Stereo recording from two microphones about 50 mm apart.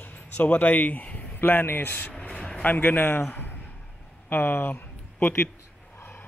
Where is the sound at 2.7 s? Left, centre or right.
Left.